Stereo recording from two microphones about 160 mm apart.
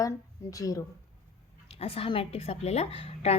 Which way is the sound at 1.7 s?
35° left (ahead or behind).